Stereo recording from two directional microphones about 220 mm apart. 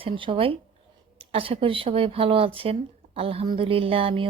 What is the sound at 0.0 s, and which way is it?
Speech, 25° right (ahead or behind).